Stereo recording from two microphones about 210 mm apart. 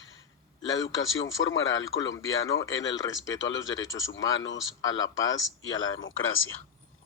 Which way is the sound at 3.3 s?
60° left (ahead or behind).